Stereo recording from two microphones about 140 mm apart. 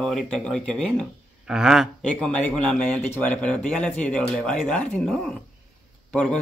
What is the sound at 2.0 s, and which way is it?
Speech, 5° left (ahead or behind).